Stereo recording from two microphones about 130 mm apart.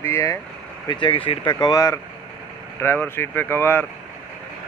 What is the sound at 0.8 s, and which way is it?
Speech, 40° left (ahead or behind).